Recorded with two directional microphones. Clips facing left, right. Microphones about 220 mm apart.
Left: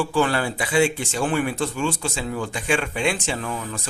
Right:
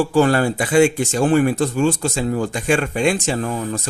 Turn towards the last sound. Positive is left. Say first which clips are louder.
# right 6 dB
turn(degrees=-40)  # may be behind; listen again after turning